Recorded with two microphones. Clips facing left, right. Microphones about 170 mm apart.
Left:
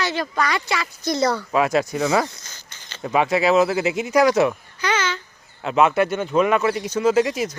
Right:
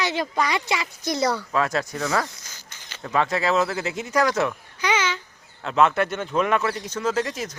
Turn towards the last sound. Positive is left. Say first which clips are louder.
# left 7 dB
turn(degrees=10)  # may be behind; listen again after turning